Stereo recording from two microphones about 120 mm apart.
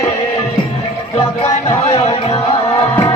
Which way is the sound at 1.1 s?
65° left (ahead or behind).